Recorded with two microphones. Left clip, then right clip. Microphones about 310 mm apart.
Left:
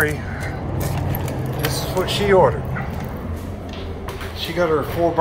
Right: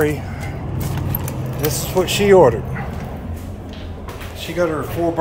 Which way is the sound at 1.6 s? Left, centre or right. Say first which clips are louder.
Right 4 dB; right.